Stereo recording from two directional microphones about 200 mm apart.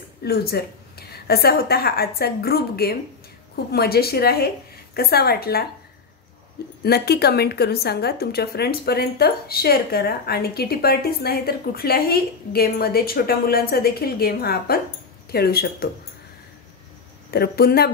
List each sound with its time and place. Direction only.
0.2 s a woman's voice: 50° left (ahead or behind)
6.8 s a woman's voice: 50° left (ahead or behind)
17.3 s a woman's voice: 50° left (ahead or behind)